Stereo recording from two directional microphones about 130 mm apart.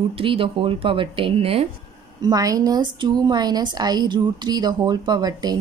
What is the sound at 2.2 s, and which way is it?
A woman's voice, 30° right (ahead or behind).